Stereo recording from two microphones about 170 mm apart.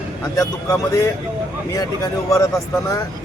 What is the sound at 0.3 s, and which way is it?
A man's voice, 20° left (ahead or behind).